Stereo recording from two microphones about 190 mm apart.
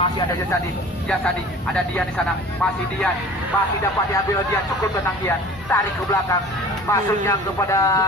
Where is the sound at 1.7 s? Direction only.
5° left (ahead or behind).